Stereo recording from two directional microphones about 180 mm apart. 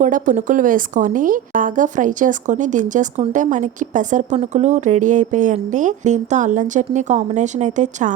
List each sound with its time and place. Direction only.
0.0 s a woman's voice: 45° right (ahead or behind)